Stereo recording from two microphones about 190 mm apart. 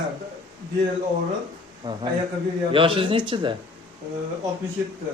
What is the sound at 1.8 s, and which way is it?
Speech, 20° right (ahead or behind).